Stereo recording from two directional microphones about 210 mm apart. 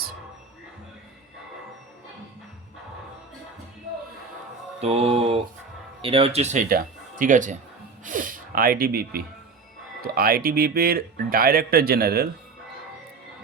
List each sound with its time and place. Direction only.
4.8 s mantra: 30° right (ahead or behind)
6.0 s speech: 25° right (ahead or behind); by 12.3 s 45° right (ahead or behind)